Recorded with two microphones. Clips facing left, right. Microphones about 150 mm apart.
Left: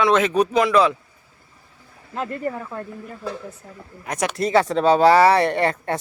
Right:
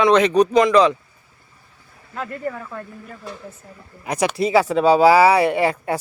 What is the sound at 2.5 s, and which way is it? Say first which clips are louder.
Speech: left 1 dB; 20° left (ahead or behind).